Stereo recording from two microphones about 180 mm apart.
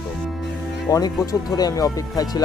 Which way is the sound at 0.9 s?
20° left (ahead or behind).